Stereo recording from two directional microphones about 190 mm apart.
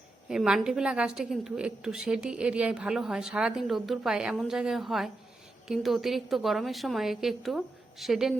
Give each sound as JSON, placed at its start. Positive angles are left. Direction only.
{"t": 0.3, "sound": "a woman's voice", "side_deg": -5}